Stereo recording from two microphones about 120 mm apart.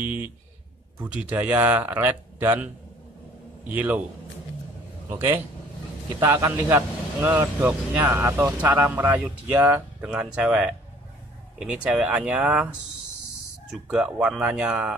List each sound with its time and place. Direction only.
0.0 s speech: 15° right (ahead or behind)
5.1 s a man's voice: 20° right (ahead or behind)
13.7 s speech: 10° right (ahead or behind)